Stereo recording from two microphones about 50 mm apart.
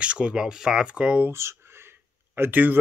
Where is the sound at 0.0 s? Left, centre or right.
Right.